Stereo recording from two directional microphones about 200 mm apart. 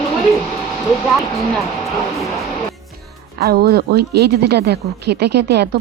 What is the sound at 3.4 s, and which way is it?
Speech, 50° right (ahead or behind).